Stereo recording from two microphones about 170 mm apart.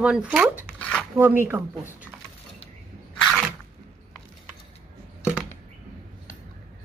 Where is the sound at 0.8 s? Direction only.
5° left (ahead or behind).